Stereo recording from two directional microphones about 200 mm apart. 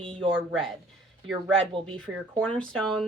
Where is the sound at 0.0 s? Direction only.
30° right (ahead or behind).